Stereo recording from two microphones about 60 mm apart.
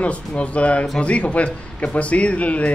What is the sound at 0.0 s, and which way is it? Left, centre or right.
A man's voice, left.